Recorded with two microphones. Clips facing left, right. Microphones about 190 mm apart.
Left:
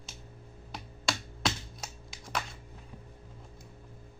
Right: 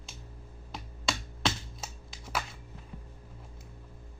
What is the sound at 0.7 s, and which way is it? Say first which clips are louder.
Computer keyboard: even; centre (ahead or behind).